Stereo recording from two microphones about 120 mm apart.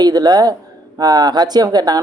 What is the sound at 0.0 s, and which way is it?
Speech, 35° right (ahead or behind).